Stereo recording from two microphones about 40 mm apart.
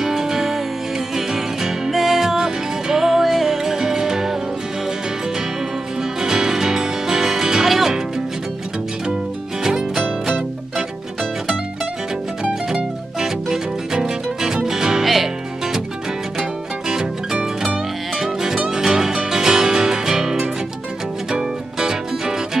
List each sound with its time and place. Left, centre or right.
0.0 s music: centre
6.2 s music: centre
9.6 s music: centre
13.2 s music: centre
16.3 s zither: centre
18.1 s music: centre